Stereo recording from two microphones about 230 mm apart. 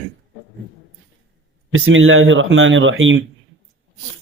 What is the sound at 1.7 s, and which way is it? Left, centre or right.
Speech, right.